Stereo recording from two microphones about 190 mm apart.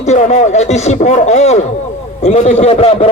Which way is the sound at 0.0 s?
35° left (ahead or behind).